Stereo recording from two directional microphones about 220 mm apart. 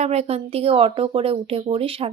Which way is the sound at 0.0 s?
30° right (ahead or behind).